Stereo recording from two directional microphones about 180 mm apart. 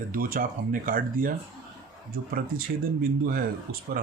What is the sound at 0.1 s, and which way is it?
Speech, 50° right (ahead or behind).